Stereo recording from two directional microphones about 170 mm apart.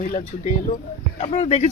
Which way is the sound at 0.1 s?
40° left (ahead or behind).